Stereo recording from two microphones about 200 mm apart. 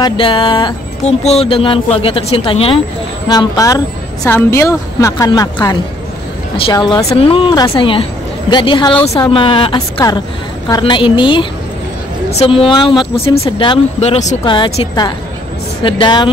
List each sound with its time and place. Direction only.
0.0 s a woman's voice: 25° left (ahead or behind)
14.4 s speech: 25° left (ahead or behind)